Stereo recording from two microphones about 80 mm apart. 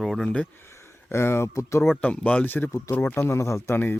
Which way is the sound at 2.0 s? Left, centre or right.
Centre.